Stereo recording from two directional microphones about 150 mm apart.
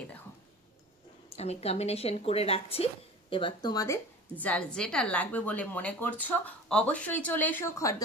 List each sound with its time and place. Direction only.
1.3 s a woman's voice: 45° left (ahead or behind); by 4.5 s 20° left (ahead or behind)
4.5 s a woman's voice: 5° left (ahead or behind)